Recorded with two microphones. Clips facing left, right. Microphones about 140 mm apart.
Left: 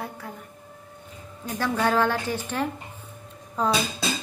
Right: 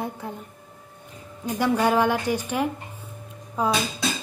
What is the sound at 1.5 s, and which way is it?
A woman's voice, 15° right (ahead or behind).